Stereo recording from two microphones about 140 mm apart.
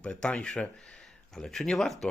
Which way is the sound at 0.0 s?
5° left (ahead or behind).